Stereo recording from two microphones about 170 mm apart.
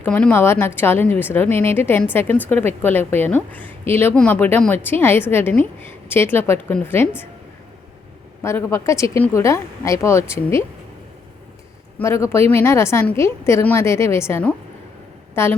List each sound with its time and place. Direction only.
0.0 s a woman's voice: 5° left (ahead or behind)
8.4 s a woman's voice: 15° left (ahead or behind)
11.9 s a woman's voice: 15° left (ahead or behind)